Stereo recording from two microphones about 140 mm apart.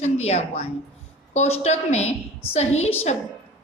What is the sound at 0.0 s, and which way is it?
A woman's voice, 50° left (ahead or behind).